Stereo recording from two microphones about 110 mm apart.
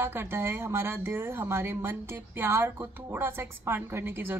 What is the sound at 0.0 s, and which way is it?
A woman's voice, 20° right (ahead or behind).